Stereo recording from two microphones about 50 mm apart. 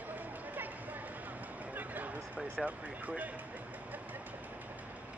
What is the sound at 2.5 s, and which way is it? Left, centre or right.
Speech, right.